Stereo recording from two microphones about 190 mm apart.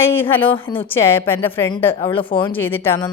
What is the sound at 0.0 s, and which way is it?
Speech, 10° left (ahead or behind).